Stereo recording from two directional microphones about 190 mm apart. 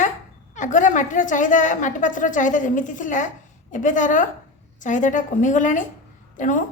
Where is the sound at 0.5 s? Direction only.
40° left (ahead or behind).